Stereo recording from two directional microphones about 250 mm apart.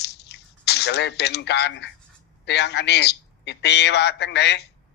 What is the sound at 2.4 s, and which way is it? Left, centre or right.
A man's voice, left.